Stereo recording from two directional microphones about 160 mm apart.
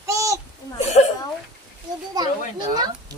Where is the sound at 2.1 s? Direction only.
25° right (ahead or behind).